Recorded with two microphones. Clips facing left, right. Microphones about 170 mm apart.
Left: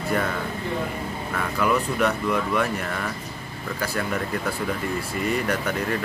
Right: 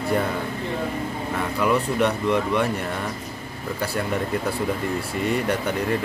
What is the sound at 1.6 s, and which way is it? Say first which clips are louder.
Speech: right 1 dB; 25° right (ahead or behind).